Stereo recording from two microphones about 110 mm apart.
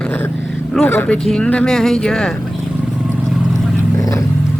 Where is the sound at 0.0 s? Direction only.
15° left (ahead or behind).